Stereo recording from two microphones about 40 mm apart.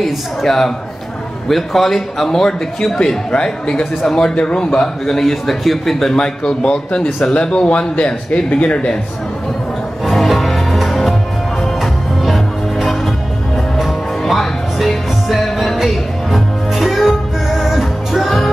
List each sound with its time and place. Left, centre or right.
0.0 s a man's voice: centre; by 4.8 s left
5.2 s a man's voice: centre
6.1 s speech: centre
7.9 s speech: left
10.0 s music: centre